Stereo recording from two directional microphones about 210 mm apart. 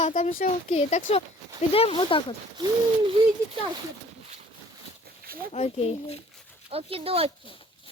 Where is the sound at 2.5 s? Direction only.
20° right (ahead or behind).